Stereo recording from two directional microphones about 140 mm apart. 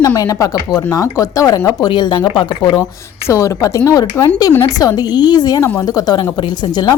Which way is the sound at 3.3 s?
20° left (ahead or behind).